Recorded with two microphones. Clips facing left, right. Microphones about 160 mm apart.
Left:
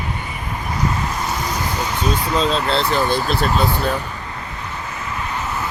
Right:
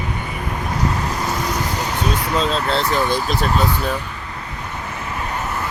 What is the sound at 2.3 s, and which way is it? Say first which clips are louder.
Speech: left 1 dB; 5° right (ahead or behind).